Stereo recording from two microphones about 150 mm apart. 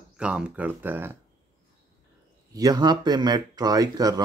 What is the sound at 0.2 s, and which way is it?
Speech, 5° right (ahead or behind).